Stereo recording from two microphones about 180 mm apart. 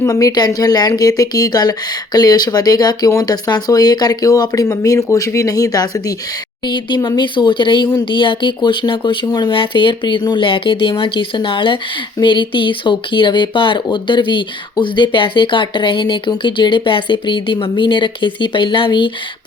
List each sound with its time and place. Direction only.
0.0 s speech: 20° left (ahead or behind)